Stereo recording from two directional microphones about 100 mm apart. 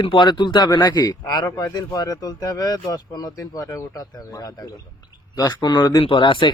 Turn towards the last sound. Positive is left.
turn(degrees=55)  # may be behind; listen again after turning